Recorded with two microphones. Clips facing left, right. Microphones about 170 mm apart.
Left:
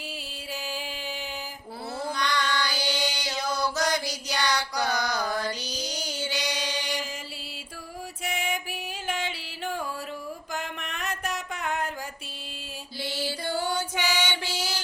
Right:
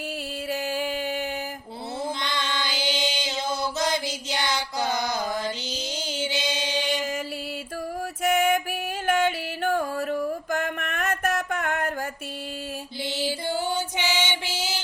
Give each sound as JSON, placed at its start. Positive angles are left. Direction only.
{"t": 0.5, "sound": "music", "side_deg": -55}
{"t": 2.1, "sound": "chant", "side_deg": -20}
{"t": 8.2, "sound": "music", "side_deg": -50}
{"t": 13.0, "sound": "a sound", "side_deg": -20}